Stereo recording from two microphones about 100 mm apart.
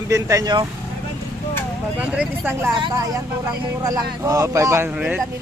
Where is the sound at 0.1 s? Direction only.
35° right (ahead or behind).